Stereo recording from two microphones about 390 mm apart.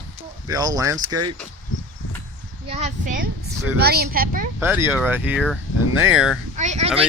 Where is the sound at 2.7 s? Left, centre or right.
Centre.